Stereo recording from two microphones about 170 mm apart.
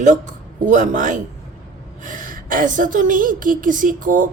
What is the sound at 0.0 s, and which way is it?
Speech, 45° right (ahead or behind).